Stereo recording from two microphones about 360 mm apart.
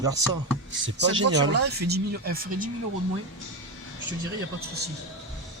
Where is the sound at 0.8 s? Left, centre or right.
Right.